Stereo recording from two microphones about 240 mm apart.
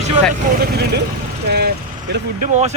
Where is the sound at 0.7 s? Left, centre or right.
Right.